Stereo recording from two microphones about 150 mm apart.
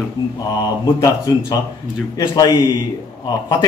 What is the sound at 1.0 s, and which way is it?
Speech, 25° left (ahead or behind).